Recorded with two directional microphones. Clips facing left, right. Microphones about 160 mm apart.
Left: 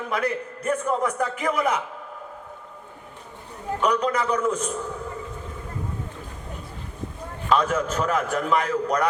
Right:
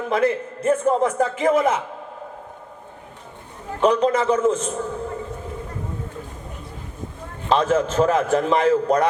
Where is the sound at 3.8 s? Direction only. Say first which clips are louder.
Right 6 dB; 25° right (ahead or behind).